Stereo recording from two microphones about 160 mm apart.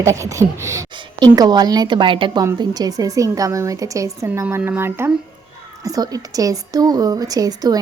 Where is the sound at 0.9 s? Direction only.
30° right (ahead or behind).